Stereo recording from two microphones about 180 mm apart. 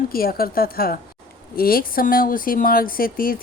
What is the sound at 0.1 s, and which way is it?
Speech, 55° left (ahead or behind).